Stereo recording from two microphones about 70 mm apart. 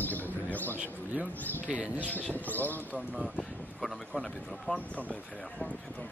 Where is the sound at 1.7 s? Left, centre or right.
Centre.